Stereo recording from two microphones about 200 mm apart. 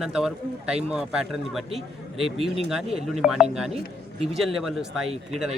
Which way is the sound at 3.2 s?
5° right (ahead or behind).